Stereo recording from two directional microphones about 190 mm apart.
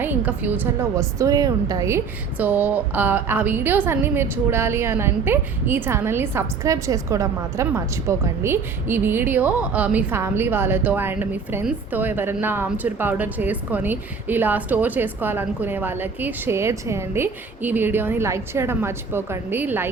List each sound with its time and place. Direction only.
0.0 s a woman's voice: 10° right (ahead or behind)